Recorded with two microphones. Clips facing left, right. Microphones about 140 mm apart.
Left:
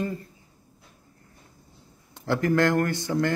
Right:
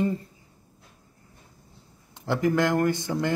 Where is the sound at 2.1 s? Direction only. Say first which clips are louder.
Even; 15° right (ahead or behind).